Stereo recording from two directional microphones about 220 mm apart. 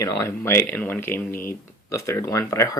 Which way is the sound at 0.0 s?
15° left (ahead or behind).